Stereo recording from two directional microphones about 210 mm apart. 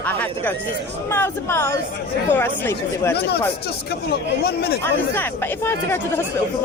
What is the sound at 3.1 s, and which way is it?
Speech, 50° left (ahead or behind).